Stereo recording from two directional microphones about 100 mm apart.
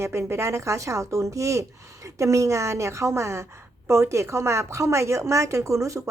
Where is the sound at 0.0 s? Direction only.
30° right (ahead or behind).